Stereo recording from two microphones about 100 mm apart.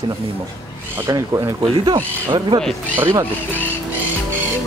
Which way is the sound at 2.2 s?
50° right (ahead or behind).